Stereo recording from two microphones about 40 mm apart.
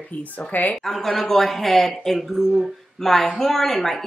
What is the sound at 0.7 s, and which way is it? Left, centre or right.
A woman's voice, centre.